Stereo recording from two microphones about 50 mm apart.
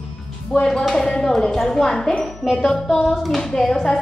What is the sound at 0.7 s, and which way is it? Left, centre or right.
A woman's voice, centre.